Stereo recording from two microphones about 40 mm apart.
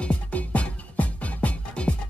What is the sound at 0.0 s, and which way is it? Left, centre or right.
Music, left.